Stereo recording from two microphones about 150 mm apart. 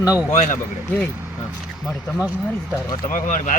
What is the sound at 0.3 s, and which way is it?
Speech, 55° left (ahead or behind).